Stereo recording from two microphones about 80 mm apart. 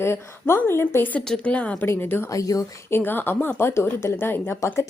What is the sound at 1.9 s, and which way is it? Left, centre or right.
Speech, left.